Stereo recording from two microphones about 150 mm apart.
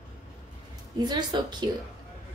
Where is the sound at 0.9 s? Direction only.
25° right (ahead or behind).